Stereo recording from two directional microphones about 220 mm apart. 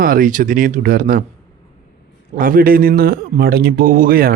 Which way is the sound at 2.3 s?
40° right (ahead or behind).